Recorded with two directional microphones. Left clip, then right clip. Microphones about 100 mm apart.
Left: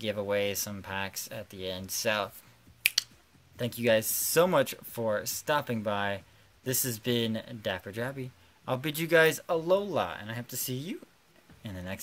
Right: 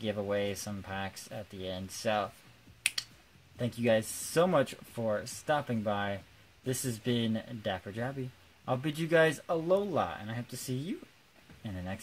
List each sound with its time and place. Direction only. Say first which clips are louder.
0.0 s speech: left 3 dB; 30° left (ahead or behind)
3.5 s speech: left 3 dB; 25° left (ahead or behind)